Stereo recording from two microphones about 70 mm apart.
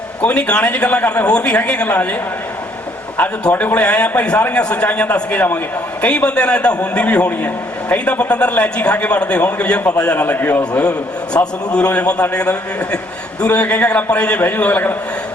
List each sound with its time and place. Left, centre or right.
0.2 s a man's voice: centre
3.2 s a man's voice: left